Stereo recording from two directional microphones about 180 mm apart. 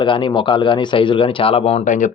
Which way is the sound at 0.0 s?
25° left (ahead or behind).